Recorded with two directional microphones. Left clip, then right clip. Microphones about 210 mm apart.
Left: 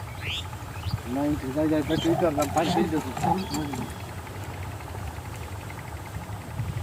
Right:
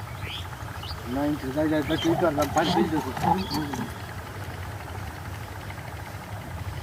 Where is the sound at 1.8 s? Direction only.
10° left (ahead or behind).